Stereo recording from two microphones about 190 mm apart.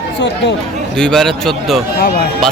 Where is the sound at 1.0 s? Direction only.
Centre (ahead or behind).